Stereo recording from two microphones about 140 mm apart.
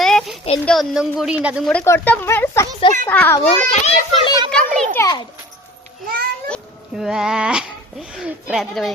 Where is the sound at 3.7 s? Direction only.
45° left (ahead or behind).